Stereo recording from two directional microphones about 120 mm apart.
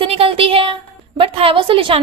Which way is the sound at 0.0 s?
50° right (ahead or behind).